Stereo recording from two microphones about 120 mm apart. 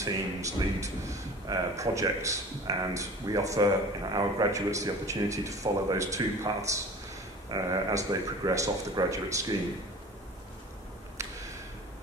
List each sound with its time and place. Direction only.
0.0 s speech: 25° right (ahead or behind)